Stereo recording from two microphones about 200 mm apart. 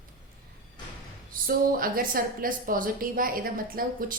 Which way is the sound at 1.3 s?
45° right (ahead or behind).